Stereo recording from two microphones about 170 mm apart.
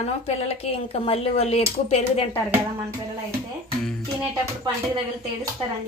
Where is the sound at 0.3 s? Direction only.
40° left (ahead or behind).